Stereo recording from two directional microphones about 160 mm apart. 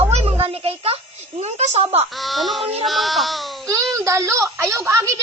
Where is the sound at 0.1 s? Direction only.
40° right (ahead or behind).